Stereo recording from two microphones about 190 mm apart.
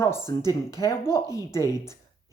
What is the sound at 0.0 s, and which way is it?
Speech, 15° left (ahead or behind).